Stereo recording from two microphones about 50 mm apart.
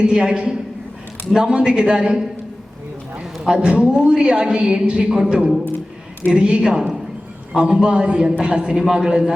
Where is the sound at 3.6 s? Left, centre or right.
Centre.